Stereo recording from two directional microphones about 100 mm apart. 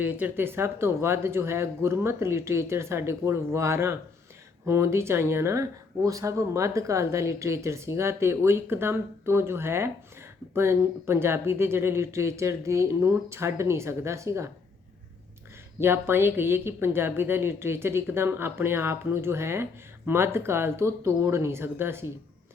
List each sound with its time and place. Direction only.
0.0 s speech: 15° right (ahead or behind)
15.8 s speech: 25° right (ahead or behind)